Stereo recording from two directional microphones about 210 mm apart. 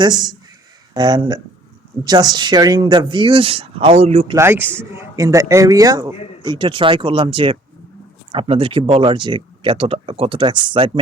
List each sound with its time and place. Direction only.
0.0 s speech: 20° right (ahead or behind)
4.4 s a man's voice: 10° right (ahead or behind)